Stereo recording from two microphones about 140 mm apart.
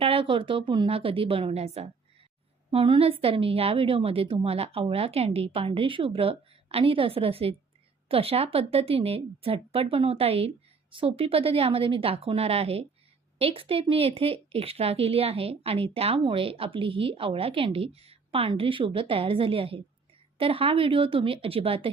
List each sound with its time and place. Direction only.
0.0 s a woman's voice: 40° right (ahead or behind)